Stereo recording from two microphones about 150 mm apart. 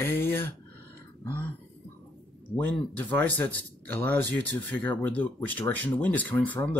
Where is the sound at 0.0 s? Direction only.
15° left (ahead or behind).